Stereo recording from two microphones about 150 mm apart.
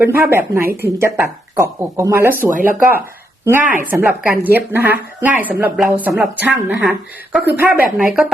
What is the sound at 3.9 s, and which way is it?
Speech, 15° right (ahead or behind).